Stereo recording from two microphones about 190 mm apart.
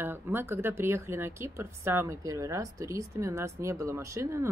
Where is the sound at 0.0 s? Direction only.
10° right (ahead or behind).